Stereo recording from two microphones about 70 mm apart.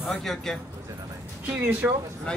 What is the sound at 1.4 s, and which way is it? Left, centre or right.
Speech, right.